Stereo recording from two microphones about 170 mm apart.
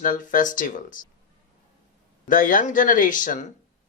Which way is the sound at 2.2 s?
50° left (ahead or behind).